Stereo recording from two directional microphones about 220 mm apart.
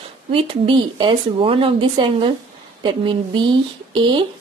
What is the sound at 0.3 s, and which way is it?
Speech, 25° right (ahead or behind).